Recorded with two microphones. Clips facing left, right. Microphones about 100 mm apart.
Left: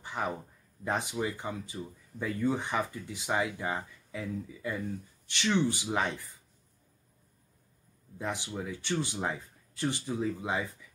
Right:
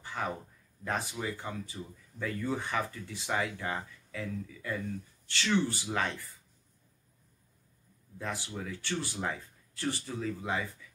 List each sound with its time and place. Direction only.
0.0 s a sound: 20° left (ahead or behind)
0.8 s speech: 20° left (ahead or behind)
8.2 s speech: 20° left (ahead or behind)